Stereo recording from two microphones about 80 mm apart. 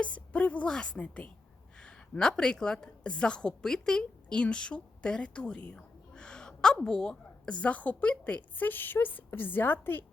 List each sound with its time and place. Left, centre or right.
0.0 s a woman's voice: centre